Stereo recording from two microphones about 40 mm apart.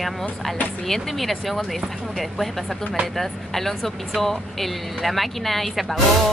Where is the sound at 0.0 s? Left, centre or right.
Centre.